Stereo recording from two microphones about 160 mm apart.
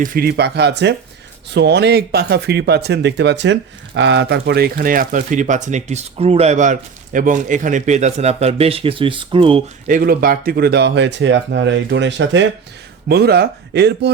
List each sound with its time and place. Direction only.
0.0 s speech: 65° right (ahead or behind); by 9.6 s 35° right (ahead or behind)
9.8 s speech: 60° right (ahead or behind); by 12.0 s 90° right
13.1 s speech: 85° right